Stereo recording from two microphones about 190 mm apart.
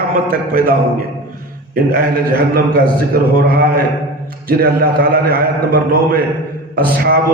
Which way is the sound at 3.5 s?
55° right (ahead or behind).